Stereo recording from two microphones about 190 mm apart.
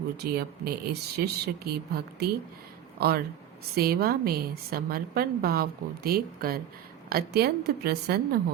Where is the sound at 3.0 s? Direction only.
55° right (ahead or behind).